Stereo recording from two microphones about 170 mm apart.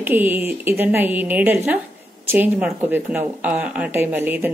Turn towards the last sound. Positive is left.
turn(degrees=-10)  # may be behind; listen again after turning